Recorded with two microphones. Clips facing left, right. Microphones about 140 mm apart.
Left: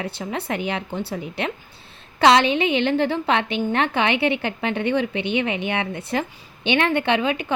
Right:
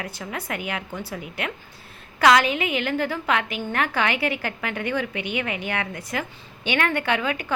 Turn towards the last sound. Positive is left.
turn(degrees=20)  # may be behind; listen again after turning